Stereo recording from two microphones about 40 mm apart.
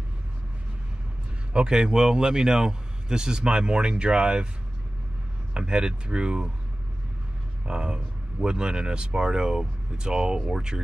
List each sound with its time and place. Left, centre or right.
1.5 s speech: right
5.5 s speech: right
7.6 s speech: right